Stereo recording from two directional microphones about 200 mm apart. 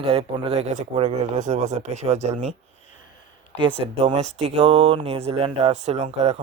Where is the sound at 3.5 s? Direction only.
25° right (ahead or behind).